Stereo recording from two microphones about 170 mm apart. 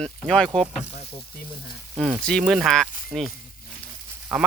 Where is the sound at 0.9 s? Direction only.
35° left (ahead or behind).